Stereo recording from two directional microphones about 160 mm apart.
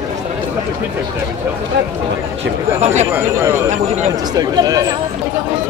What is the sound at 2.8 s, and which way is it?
Speech, 45° right (ahead or behind).